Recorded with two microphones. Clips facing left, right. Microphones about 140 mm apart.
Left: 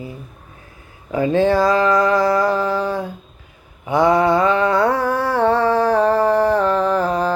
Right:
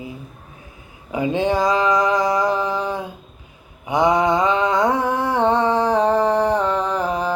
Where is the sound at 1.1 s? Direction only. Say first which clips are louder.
Left 4 dB; 15° right (ahead or behind).